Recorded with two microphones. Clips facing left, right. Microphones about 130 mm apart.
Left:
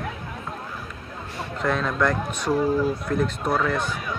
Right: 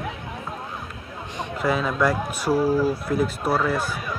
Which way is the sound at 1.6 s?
5° right (ahead or behind).